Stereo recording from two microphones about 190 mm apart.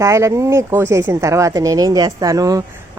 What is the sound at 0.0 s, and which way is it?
Speech, 15° right (ahead or behind).